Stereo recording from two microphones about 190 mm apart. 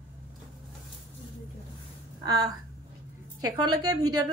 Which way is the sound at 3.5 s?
20° right (ahead or behind).